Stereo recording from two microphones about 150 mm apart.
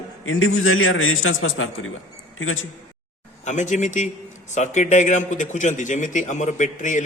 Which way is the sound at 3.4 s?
55° left (ahead or behind).